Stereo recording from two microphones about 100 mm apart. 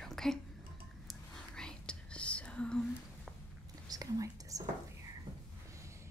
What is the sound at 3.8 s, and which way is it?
Whispering, 40° right (ahead or behind).